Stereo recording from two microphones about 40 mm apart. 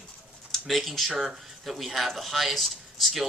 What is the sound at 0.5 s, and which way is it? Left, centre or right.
Speech, centre.